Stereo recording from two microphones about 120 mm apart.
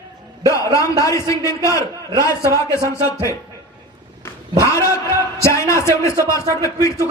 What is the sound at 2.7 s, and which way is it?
Speech, 25° left (ahead or behind).